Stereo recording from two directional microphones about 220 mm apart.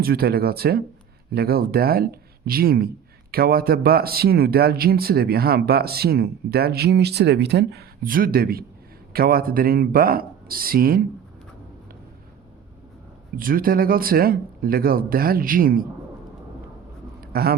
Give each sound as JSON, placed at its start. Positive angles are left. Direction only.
{"t": 0.0, "sound": "speech", "side_deg": -45}
{"t": 13.3, "sound": "speech", "side_deg": -40}
{"t": 17.2, "sound": "a sound", "side_deg": -45}